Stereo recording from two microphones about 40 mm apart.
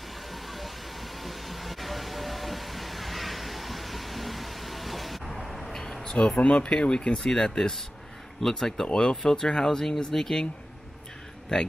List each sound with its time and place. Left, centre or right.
0.3 s vehicle: centre
5.7 s a sound: centre
6.2 s speech: left
7.2 s speech: centre